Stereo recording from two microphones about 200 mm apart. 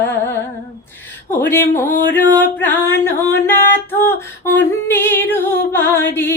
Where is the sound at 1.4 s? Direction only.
10° left (ahead or behind).